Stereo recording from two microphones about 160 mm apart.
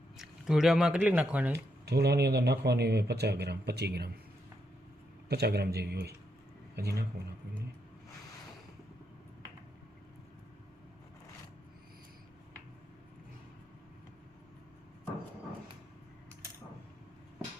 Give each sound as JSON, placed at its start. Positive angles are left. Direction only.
{"t": 0.2, "sound": "speech", "side_deg": -5}
{"t": 1.5, "sound": "speech", "side_deg": -90}
{"t": 5.3, "sound": "speech", "side_deg": -90}